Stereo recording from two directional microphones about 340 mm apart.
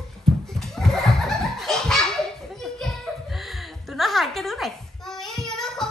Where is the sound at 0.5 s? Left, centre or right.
Centre.